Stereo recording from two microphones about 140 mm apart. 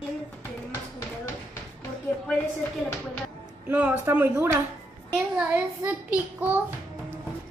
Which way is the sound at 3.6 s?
10° right (ahead or behind).